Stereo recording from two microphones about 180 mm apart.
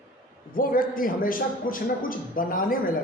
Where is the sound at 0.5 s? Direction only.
50° left (ahead or behind).